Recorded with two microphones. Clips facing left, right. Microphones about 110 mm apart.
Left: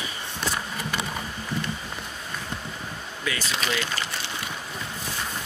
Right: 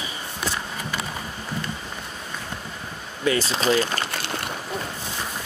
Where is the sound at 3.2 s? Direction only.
35° right (ahead or behind).